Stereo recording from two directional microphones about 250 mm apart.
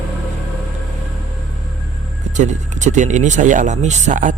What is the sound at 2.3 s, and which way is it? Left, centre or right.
Speech, right.